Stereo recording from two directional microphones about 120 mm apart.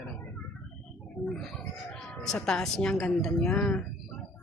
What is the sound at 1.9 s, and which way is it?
Speech, 5° left (ahead or behind).